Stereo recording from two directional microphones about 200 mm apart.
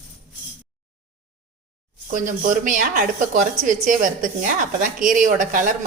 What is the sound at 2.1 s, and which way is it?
A woman's voice, 40° right (ahead or behind).